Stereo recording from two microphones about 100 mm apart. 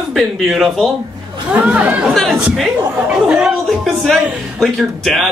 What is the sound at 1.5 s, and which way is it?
Speech, 15° right (ahead or behind).